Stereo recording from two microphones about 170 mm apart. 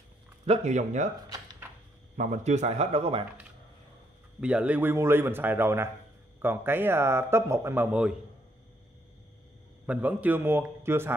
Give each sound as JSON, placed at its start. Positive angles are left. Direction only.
{"t": 0.5, "sound": "speech", "side_deg": -45}
{"t": 2.1, "sound": "a man's voice", "side_deg": -45}
{"t": 4.4, "sound": "speech", "side_deg": -5}
{"t": 9.8, "sound": "speech", "side_deg": -10}